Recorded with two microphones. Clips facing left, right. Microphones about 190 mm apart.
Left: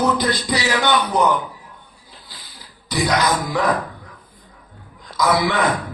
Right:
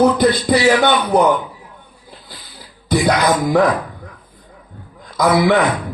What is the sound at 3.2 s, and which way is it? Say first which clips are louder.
Music: right 7 dB; 55° right (ahead or behind).